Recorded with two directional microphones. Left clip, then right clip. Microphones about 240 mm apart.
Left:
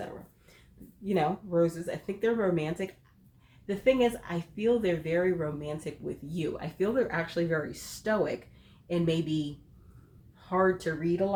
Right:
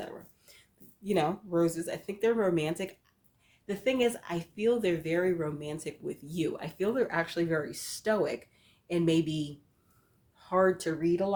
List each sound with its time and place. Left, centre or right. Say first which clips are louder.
1.0 s speech: even; right
10.5 s speech: even; right